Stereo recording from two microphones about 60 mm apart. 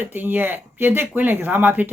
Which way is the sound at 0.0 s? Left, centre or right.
Right.